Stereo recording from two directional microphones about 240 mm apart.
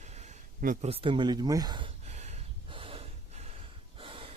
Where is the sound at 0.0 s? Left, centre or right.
Right.